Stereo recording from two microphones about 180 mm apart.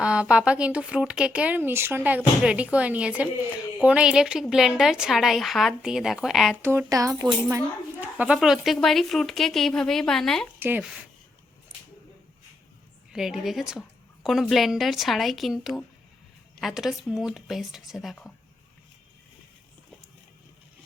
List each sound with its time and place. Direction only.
0.0 s a woman's voice: 5° right (ahead or behind)
6.6 s speech: 15° right (ahead or behind)
8.0 s a woman's voice: 5° right (ahead or behind)
10.6 s speech: 10° right (ahead or behind)
13.1 s a woman's voice: centre (ahead or behind)